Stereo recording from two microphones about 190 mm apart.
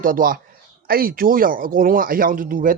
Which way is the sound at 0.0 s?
45° right (ahead or behind).